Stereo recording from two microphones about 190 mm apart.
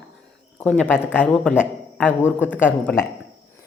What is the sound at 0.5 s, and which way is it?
A man's voice, 5° left (ahead or behind).